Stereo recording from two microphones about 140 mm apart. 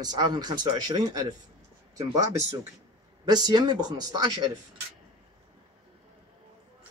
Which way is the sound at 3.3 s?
30° right (ahead or behind).